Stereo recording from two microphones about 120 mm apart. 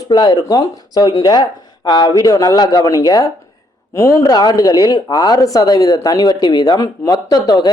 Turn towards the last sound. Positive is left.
turn(degrees=35)  # may be behind; listen again after turning